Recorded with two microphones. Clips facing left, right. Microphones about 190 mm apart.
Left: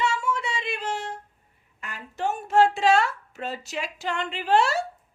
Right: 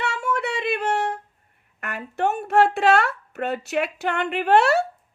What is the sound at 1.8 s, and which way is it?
A woman's voice, 60° right (ahead or behind).